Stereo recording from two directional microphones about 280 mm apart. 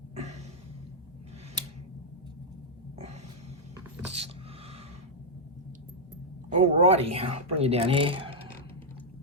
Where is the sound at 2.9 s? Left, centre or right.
Right.